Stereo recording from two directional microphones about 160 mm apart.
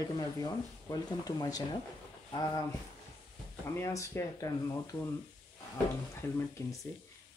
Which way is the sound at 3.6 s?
15° left (ahead or behind).